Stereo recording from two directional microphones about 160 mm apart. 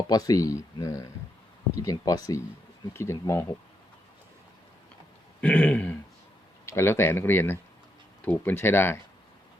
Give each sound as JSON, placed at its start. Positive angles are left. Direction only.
{"t": 0.1, "sound": "speech", "side_deg": 25}
{"t": 5.4, "sound": "speech", "side_deg": 10}